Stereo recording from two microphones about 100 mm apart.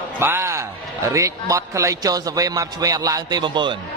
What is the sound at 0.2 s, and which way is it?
A man's voice, 25° right (ahead or behind).